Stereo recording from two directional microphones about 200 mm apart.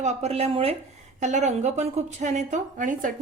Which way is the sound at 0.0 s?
35° right (ahead or behind).